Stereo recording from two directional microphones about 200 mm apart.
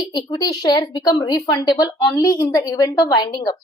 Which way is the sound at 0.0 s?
20° left (ahead or behind).